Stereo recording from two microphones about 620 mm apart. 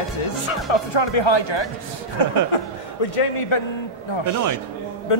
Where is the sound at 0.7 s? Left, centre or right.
Left.